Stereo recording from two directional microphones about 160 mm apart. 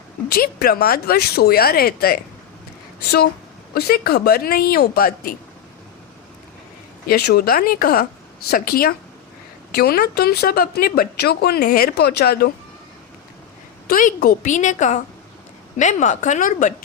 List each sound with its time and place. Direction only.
0.3 s speech: 70° left (ahead or behind)
3.8 s speech: 75° left (ahead or behind)
7.1 s speech: 75° left (ahead or behind)
13.8 s a woman's voice: 65° left (ahead or behind)